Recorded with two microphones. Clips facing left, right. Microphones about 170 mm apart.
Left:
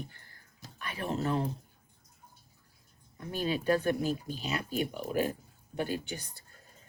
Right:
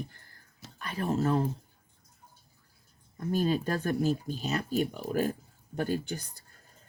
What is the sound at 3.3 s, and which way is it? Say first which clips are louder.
Speech: right 1 dB; 40° right (ahead or behind).